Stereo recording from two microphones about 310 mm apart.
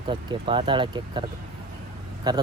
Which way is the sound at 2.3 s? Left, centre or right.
Centre.